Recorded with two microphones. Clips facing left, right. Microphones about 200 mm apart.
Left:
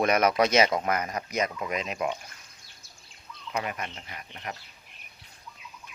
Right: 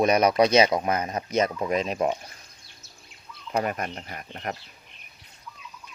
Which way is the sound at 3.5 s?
45° right (ahead or behind).